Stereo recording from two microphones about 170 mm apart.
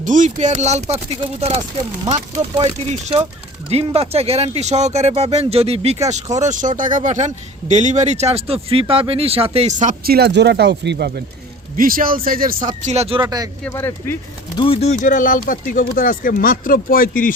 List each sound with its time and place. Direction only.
0.0 s speech: 50° right (ahead or behind)
2.0 s speech: 35° right (ahead or behind)
6.2 s speech: 20° right (ahead or behind)
6.5 s speech: 50° right (ahead or behind); by 11.2 s 70° right (ahead or behind)
11.8 s speech: 55° right (ahead or behind)
12.8 s speech: 40° right (ahead or behind)
13.2 s speech: 20° right (ahead or behind)
13.7 s speech: 15° left (ahead or behind)
14.5 s speech: 30° left (ahead or behind); by 17.3 s 55° left (ahead or behind)